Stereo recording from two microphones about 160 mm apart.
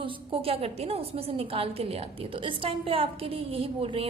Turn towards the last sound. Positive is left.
turn(degrees=-35)  # may be behind; listen again after turning